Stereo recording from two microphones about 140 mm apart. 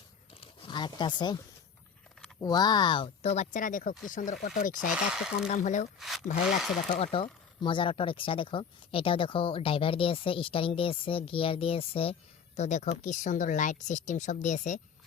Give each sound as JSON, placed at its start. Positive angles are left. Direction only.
{"t": 0.3, "sound": "a sound", "side_deg": 35}
{"t": 2.4, "sound": "speech", "side_deg": 30}
{"t": 5.1, "sound": "speech", "side_deg": -5}
{"t": 5.5, "sound": "speech", "side_deg": 60}
{"t": 6.0, "sound": "a sound", "side_deg": 0}
{"t": 7.0, "sound": "speech", "side_deg": 40}
{"t": 12.5, "sound": "speech", "side_deg": 55}